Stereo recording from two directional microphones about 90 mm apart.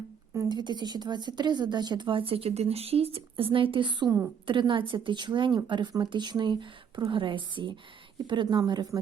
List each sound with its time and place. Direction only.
0.4 s a woman's voice: 55° right (ahead or behind)